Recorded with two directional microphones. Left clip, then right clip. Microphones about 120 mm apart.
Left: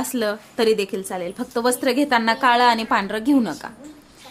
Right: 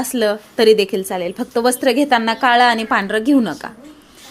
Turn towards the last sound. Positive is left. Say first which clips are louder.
# right 4 dB
turn(degrees=-30)  # may be behind; listen again after turning